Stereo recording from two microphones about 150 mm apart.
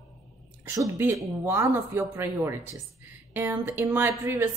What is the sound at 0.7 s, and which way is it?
A woman's voice, 15° right (ahead or behind).